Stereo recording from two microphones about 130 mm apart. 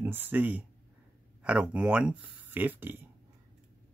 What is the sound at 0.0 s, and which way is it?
Speech, 15° right (ahead or behind).